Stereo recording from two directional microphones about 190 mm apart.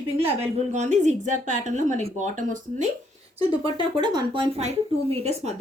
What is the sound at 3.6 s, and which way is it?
A woman's voice, 25° right (ahead or behind).